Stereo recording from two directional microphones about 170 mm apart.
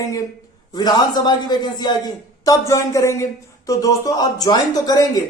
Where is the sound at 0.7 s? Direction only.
25° left (ahead or behind).